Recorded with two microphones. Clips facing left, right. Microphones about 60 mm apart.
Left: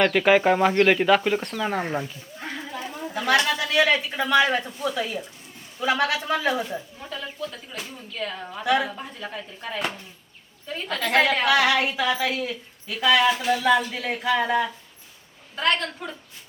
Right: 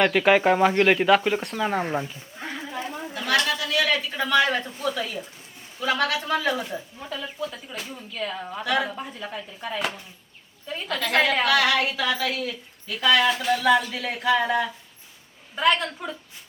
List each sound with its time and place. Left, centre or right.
0.0 s a woman's voice: centre
2.0 s a sound: centre
3.2 s speech: centre
3.6 s speech: left
6.7 s a woman's voice: centre
11.4 s a woman's voice: centre